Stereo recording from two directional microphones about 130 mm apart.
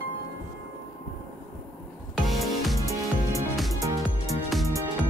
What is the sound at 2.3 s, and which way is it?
Music, centre (ahead or behind).